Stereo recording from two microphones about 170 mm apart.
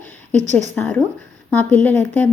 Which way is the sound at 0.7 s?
10° left (ahead or behind).